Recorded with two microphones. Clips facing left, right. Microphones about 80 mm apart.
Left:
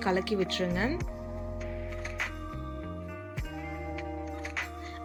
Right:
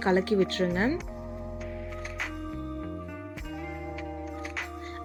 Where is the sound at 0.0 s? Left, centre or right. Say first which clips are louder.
Right 4 dB; right.